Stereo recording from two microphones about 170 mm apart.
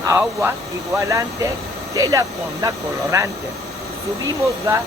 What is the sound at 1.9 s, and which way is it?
Speech, 20° right (ahead or behind).